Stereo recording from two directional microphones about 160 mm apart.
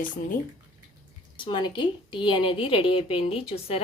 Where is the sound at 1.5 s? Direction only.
30° left (ahead or behind).